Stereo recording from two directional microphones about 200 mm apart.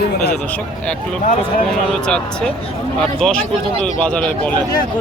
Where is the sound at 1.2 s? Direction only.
40° left (ahead or behind).